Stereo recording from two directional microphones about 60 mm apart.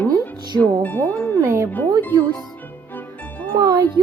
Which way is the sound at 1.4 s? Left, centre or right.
Right.